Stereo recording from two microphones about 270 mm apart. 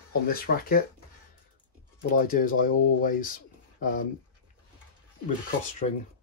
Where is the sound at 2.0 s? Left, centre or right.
Left.